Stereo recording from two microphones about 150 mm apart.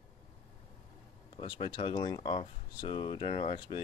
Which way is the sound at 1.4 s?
35° left (ahead or behind).